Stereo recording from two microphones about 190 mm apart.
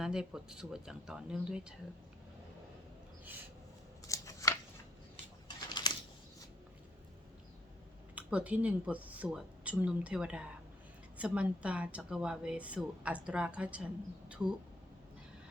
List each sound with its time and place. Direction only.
0.0 s speech: 5° right (ahead or behind)
4.0 s scissors: 15° left (ahead or behind)
5.6 s a sound: 20° left (ahead or behind)
8.1 s speech: 5° right (ahead or behind)